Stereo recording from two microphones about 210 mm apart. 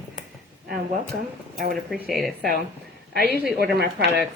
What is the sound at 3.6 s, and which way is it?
Speech, 50° right (ahead or behind).